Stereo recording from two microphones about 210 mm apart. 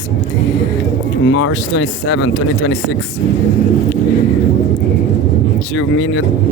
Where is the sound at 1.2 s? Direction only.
60° left (ahead or behind).